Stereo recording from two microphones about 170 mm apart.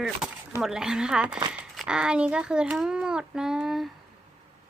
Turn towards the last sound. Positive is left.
turn(degrees=0)  # may be behind; listen again after turning